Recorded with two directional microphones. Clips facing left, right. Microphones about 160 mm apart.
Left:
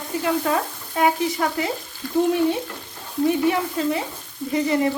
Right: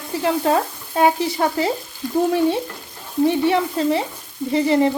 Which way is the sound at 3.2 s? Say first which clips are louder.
Right 2 dB; 30° right (ahead or behind).